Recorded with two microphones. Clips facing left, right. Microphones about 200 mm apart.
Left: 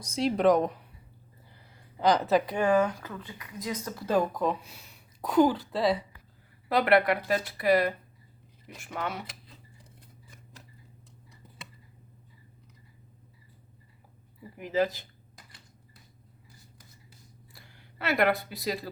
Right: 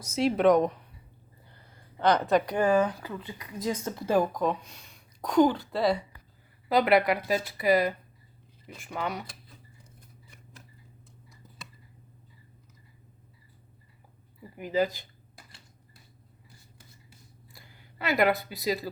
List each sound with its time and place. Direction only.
0.0 s speech: centre (ahead or behind)
2.0 s speech: 5° left (ahead or behind)
2.7 s speech: 10° right (ahead or behind)
3.6 s speech: 30° right (ahead or behind)
4.0 s speech: 10° right (ahead or behind)
4.4 s a woman's voice: 5° left (ahead or behind)
14.6 s speech: centre (ahead or behind)
17.5 s speech: centre (ahead or behind)